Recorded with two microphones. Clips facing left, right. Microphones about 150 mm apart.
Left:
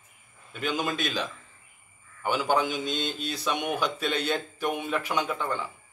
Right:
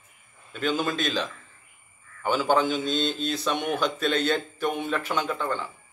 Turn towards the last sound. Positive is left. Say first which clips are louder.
# right 1 dB
turn(degrees=15)  # may be behind; listen again after turning